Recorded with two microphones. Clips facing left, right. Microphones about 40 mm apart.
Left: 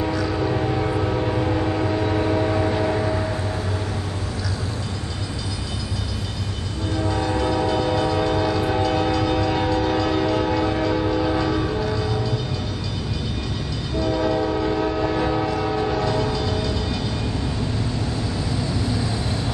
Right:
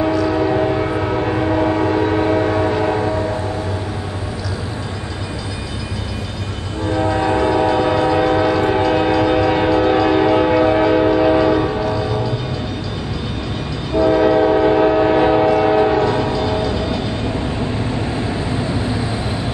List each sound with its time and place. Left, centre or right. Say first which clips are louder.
0.3 s train: right 6 dB; right
7.2 s train: right 6 dB; right
11.8 s music: right 5 dB; centre
13.9 s train: right 9 dB; right
18.1 s vehicle: right 5 dB; right